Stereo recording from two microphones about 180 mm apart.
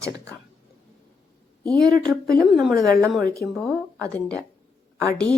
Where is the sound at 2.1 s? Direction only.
Centre (ahead or behind).